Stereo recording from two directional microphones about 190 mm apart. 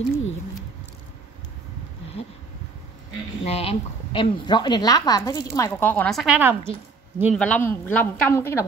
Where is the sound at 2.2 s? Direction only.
30° left (ahead or behind).